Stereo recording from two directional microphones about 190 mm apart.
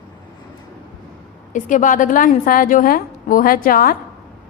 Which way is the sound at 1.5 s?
45° left (ahead or behind).